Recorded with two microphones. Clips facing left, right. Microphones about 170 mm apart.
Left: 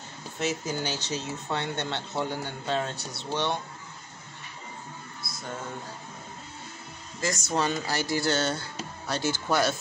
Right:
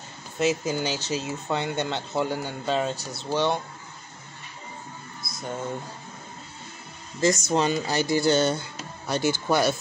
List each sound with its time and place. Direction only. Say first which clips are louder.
0.4 s speech: right 5 dB; 10° right (ahead or behind)
5.2 s a sound: right 1 dB; 20° right (ahead or behind)
7.2 s speech: right 6 dB; 20° right (ahead or behind)